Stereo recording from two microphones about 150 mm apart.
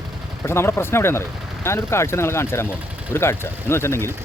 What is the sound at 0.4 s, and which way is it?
Speech, 15° left (ahead or behind).